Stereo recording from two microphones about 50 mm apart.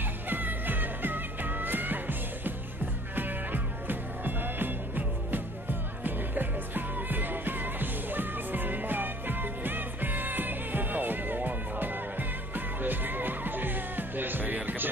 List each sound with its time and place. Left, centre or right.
0.3 s music: right